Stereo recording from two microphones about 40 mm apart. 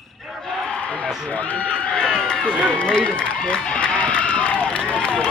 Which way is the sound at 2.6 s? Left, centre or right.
Left.